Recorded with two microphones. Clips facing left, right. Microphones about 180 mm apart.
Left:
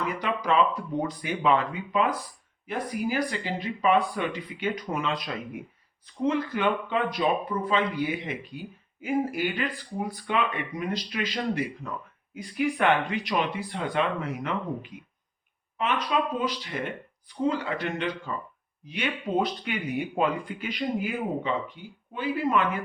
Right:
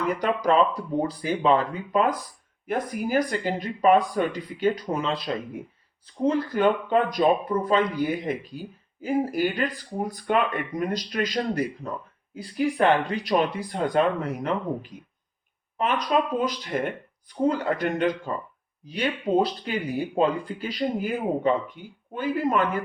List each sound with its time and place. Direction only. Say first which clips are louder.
0.1 s speech: right 6 dB; 40° right (ahead or behind)